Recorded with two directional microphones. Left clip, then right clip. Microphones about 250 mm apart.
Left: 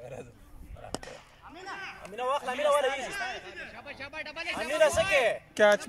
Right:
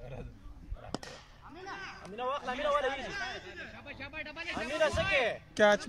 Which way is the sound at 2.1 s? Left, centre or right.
Left.